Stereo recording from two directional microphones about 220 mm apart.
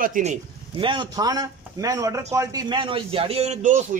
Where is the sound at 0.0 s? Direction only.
35° right (ahead or behind).